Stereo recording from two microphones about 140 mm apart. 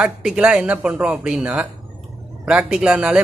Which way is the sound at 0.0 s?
5° right (ahead or behind).